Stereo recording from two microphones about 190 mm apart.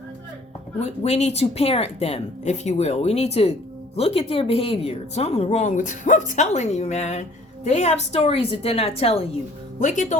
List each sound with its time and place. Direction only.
0.8 s speech: 35° left (ahead or behind)